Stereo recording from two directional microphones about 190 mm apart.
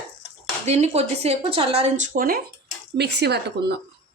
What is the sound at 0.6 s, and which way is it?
Speech, 35° right (ahead or behind).